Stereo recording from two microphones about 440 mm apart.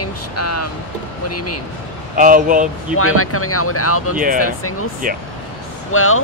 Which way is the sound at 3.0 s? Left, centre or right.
Left.